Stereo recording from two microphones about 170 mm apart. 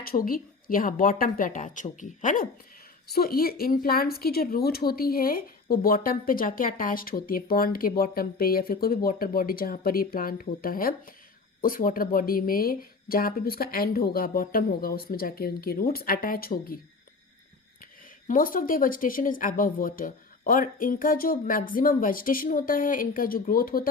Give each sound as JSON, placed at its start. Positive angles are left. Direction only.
{"t": 0.0, "sound": "a woman's voice", "side_deg": 60}
{"t": 18.3, "sound": "a woman's voice", "side_deg": 55}